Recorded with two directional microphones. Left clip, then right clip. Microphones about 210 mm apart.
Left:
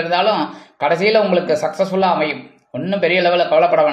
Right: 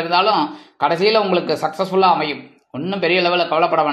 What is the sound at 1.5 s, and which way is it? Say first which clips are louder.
Speech: left 3 dB; 40° right (ahead or behind).